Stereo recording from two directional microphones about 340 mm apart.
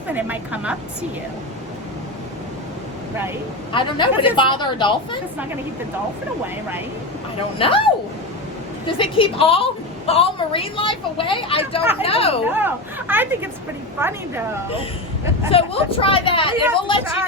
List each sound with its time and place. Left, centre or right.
0.1 s speech: centre
3.7 s a woman's voice: centre
7.6 s a woman's voice: centre
9.0 s a woman's voice: centre
12.5 s a woman's voice: centre
15.4 s a woman's voice: centre